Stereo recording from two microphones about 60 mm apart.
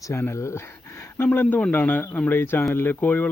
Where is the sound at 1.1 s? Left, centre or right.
Left.